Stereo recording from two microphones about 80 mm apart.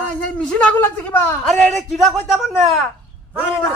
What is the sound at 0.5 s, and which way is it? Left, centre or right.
Speech, centre.